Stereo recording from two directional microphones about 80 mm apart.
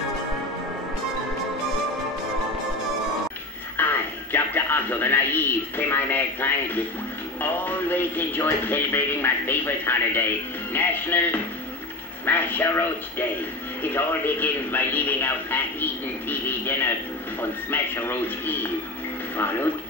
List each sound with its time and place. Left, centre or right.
3.7 s speech: left